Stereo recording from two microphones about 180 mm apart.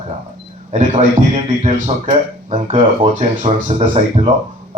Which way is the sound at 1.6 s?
40° right (ahead or behind).